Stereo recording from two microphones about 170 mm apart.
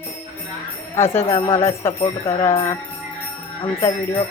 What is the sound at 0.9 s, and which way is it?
Speech, 15° left (ahead or behind).